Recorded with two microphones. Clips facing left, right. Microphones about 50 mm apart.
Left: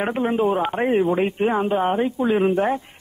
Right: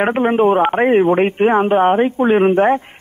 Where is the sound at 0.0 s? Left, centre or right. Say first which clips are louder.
Right 7 dB; right.